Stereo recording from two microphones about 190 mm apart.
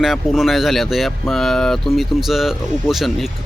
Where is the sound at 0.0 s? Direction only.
Centre (ahead or behind).